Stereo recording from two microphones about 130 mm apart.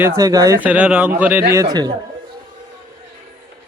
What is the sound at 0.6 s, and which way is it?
Speech, 10° right (ahead or behind).